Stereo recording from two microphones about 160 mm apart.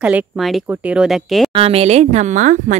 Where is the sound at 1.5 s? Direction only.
40° right (ahead or behind).